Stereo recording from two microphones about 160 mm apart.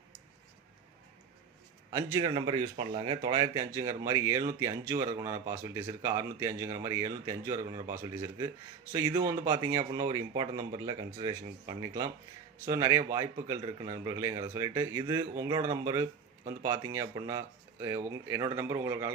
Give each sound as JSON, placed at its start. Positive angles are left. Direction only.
{"t": 1.9, "sound": "speech", "side_deg": -25}